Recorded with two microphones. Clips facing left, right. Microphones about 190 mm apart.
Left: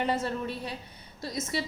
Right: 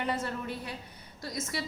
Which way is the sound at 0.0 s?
25° left (ahead or behind).